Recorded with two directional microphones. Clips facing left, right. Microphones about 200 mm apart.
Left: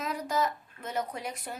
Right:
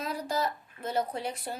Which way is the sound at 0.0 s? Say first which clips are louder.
Left 1 dB; 30° right (ahead or behind).